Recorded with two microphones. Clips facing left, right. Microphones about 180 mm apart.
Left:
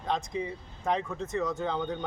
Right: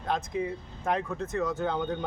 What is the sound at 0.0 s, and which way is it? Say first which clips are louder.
Speech: right 1 dB; centre (ahead or behind).